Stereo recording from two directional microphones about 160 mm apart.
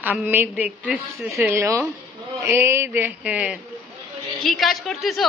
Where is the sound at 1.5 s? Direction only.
20° right (ahead or behind); by 5.3 s centre (ahead or behind).